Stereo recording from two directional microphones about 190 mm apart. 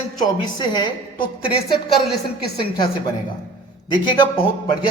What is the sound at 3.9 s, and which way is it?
Speech, 25° left (ahead or behind).